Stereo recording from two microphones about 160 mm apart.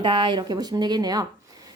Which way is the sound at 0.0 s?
30° right (ahead or behind).